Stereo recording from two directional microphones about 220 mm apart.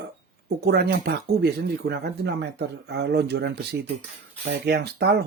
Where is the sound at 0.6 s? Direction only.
45° right (ahead or behind).